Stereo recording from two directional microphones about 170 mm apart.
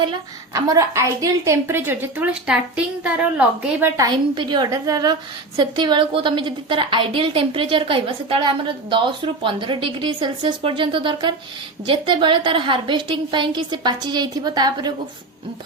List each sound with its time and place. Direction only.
0.0 s a woman's voice: 25° right (ahead or behind)